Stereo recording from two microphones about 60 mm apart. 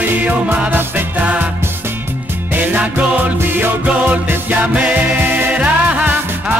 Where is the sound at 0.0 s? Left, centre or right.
Right.